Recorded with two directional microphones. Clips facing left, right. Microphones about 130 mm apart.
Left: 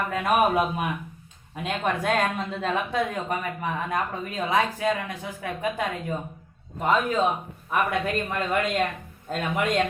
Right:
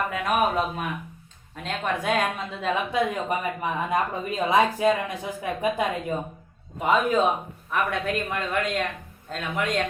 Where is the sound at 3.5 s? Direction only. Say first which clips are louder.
Right 2 dB; 15° right (ahead or behind).